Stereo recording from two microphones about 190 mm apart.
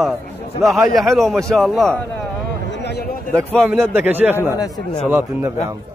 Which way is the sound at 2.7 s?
60° left (ahead or behind).